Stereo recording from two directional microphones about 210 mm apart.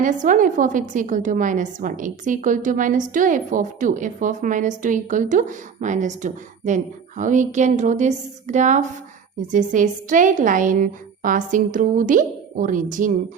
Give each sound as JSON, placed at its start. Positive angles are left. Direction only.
{"t": 0.0, "sound": "speech", "side_deg": -40}